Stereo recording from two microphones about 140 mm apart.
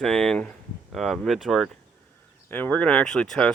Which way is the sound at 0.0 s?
5° left (ahead or behind).